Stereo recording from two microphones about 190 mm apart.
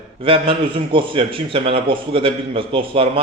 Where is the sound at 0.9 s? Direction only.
30° right (ahead or behind).